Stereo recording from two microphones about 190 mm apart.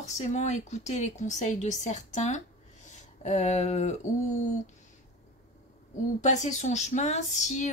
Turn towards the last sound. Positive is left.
turn(degrees=40)  # may be behind; listen again after turning